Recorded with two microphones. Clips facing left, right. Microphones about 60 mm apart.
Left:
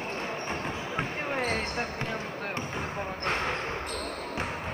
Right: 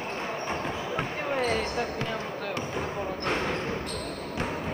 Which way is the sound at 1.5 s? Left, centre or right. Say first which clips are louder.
Right 3 dB; left.